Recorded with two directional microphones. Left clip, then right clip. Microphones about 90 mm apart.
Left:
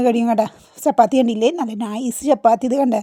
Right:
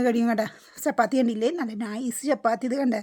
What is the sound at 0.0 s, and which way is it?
Speech, 30° left (ahead or behind).